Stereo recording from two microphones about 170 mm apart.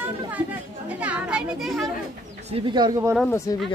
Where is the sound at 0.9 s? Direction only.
5° right (ahead or behind).